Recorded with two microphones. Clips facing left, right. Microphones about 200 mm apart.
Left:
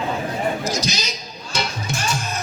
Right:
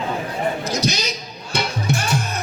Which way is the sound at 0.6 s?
60° right (ahead or behind).